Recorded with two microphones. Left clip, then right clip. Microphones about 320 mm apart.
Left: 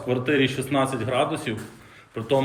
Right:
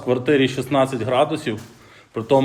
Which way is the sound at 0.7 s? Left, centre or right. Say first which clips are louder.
Right 5 dB; centre.